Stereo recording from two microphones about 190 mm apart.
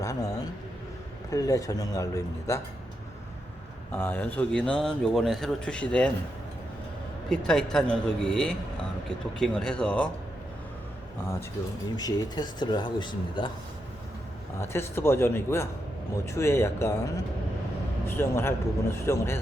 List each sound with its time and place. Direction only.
0.0 s a sound: 20° left (ahead or behind)
1.3 s a man's voice: 20° left (ahead or behind)
3.9 s a man's voice: 10° left (ahead or behind)
7.3 s a man's voice: 5° left (ahead or behind)
11.9 s speech: 20° left (ahead or behind)
14.6 s a man's voice: 15° left (ahead or behind)
18.0 s a man's voice: 10° left (ahead or behind)